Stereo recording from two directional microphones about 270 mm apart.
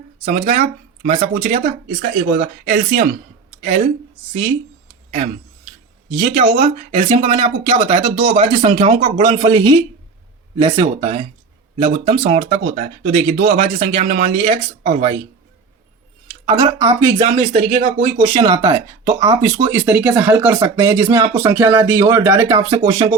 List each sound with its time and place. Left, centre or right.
0.3 s speech: right
6.4 s speech: right
10.7 s speech: right
16.6 s speech: centre
17.2 s speech: right
18.3 s speech: centre